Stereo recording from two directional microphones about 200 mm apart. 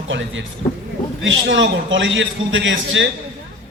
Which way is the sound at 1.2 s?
70° right (ahead or behind).